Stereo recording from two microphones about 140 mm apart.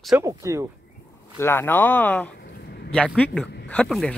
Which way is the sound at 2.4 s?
90° left.